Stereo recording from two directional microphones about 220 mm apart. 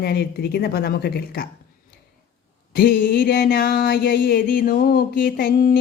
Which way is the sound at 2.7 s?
45° left (ahead or behind).